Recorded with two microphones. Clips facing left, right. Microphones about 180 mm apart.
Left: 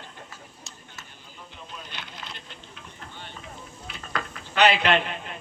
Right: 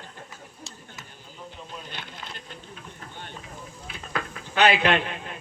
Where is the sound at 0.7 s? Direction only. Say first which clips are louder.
Right 2 dB; 30° right (ahead or behind).